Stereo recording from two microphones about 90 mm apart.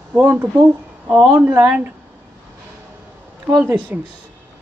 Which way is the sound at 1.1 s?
15° right (ahead or behind).